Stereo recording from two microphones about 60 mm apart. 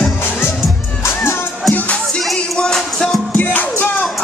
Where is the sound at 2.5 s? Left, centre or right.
Centre.